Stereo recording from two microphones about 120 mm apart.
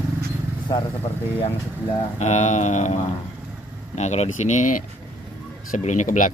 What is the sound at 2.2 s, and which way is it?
Speech, 70° left (ahead or behind).